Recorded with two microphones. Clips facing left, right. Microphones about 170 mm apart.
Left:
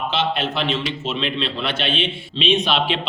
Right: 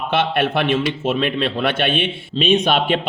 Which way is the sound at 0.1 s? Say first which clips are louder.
Right 8 dB; 60° right (ahead or behind).